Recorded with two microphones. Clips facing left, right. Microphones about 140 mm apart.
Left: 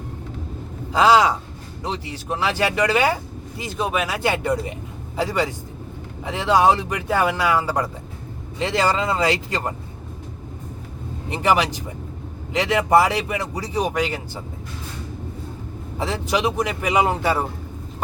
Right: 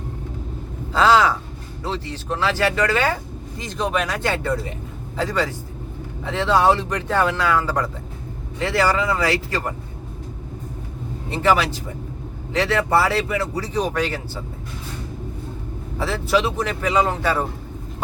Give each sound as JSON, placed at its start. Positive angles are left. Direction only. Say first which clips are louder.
{"t": 0.9, "sound": "speech", "louder": "left 1 dB", "side_deg": 15}
{"t": 11.3, "sound": "speech", "louder": "right 1 dB", "side_deg": 15}
{"t": 16.0, "sound": "speech", "louder": "right 2 dB", "side_deg": 15}